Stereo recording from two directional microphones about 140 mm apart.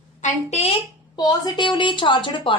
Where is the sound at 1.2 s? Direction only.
30° left (ahead or behind).